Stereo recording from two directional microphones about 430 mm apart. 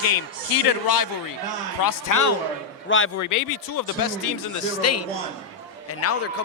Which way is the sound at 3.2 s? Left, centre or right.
Left.